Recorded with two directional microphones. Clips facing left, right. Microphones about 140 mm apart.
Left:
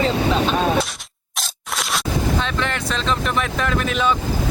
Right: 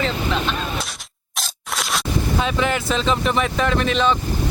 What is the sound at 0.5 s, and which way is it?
Artillery fire, 70° left (ahead or behind).